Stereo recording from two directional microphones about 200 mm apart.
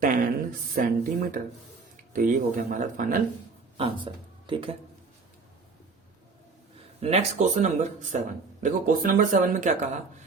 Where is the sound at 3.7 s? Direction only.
25° right (ahead or behind).